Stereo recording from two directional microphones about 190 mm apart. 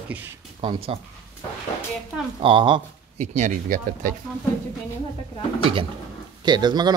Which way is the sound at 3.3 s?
40° right (ahead or behind).